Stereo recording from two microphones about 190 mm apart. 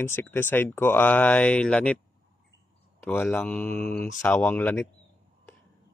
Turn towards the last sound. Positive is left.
turn(degrees=10)  # may be behind; listen again after turning